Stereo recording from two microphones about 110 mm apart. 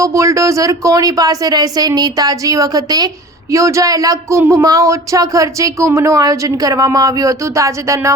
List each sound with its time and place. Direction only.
0.0 s speech: 30° right (ahead or behind)